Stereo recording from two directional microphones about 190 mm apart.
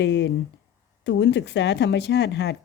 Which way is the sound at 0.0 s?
70° left (ahead or behind).